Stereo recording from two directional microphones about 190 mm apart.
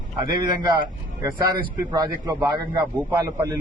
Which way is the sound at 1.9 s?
20° right (ahead or behind).